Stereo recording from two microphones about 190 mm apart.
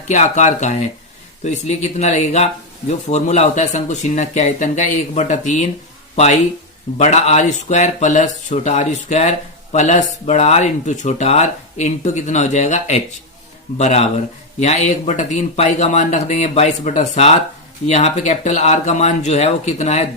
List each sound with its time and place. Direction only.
0.1 s speech: 35° left (ahead or behind)
7.0 s speech: 35° left (ahead or behind)